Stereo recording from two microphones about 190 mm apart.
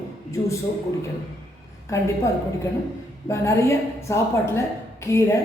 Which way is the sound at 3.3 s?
15° left (ahead or behind).